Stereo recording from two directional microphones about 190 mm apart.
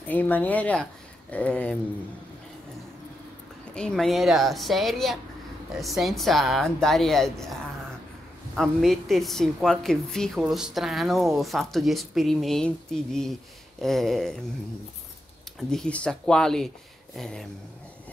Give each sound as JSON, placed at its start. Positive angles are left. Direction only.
{"t": 0.0, "sound": "speech", "side_deg": 10}
{"t": 3.7, "sound": "a woman's voice", "side_deg": 5}
{"t": 8.5, "sound": "a woman's voice", "side_deg": 0}
{"t": 15.7, "sound": "a woman's voice", "side_deg": 5}